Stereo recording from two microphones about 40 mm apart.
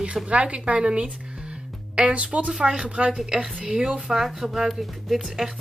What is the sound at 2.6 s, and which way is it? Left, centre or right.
Speech, right.